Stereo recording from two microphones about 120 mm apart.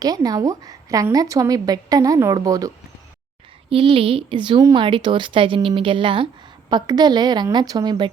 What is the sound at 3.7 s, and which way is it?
Speech, 50° right (ahead or behind).